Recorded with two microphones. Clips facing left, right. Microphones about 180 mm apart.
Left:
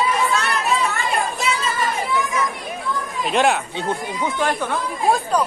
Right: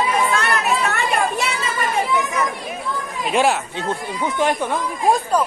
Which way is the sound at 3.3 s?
Centre (ahead or behind).